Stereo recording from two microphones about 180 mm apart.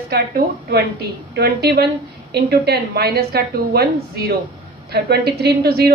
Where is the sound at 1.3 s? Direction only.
65° right (ahead or behind).